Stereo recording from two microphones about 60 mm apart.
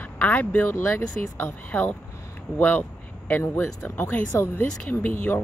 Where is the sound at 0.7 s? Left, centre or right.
Left.